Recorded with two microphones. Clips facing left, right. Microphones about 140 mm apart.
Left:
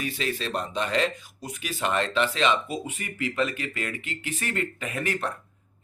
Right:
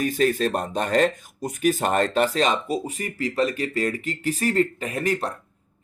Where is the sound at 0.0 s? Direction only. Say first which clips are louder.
Right 9 dB; 45° right (ahead or behind).